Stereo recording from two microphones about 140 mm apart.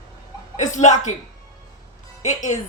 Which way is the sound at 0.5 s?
60° left (ahead or behind).